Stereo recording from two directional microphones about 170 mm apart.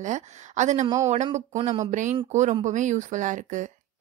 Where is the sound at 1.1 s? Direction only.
45° right (ahead or behind).